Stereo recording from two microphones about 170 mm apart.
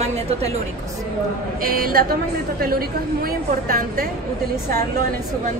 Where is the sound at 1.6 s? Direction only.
60° right (ahead or behind).